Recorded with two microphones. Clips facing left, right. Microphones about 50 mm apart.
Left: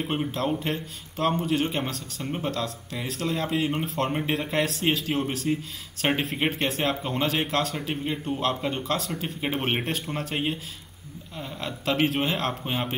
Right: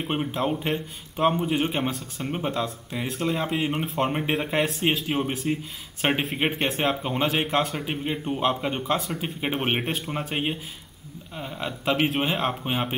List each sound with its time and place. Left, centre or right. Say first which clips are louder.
0.0 s a man's voice: right 1 dB; centre